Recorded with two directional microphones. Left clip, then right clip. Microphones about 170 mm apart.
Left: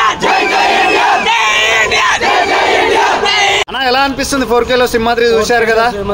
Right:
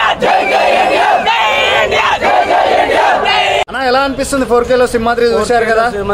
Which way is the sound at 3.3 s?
30° right (ahead or behind).